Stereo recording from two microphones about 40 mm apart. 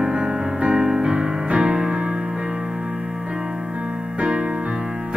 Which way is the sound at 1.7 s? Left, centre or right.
Centre.